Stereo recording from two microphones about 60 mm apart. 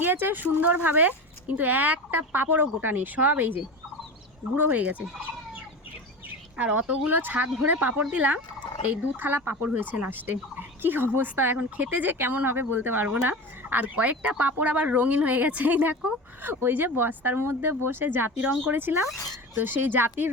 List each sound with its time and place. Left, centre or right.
0.0 s speech: right
6.6 s speech: right
13.8 s speech: right